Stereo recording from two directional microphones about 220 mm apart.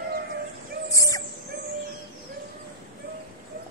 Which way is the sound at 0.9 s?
15° left (ahead or behind).